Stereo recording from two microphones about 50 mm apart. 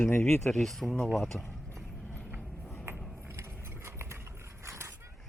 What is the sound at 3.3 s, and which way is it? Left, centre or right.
Vehicle, right.